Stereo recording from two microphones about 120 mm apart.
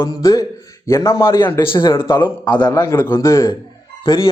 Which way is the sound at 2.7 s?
25° left (ahead or behind).